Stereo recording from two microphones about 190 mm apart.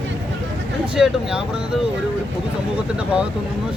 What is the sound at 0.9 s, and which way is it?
Speech, 5° right (ahead or behind).